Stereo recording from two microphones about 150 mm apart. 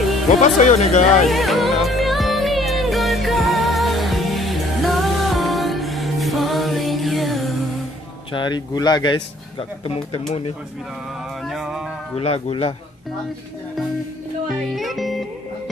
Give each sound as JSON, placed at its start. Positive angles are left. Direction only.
{"t": 0.6, "sound": "speech", "side_deg": 50}
{"t": 1.2, "sound": "music", "side_deg": 0}
{"t": 8.3, "sound": "speech", "side_deg": 30}
{"t": 11.4, "sound": "music", "side_deg": 0}
{"t": 12.2, "sound": "speech", "side_deg": 40}
{"t": 14.5, "sound": "speech", "side_deg": 0}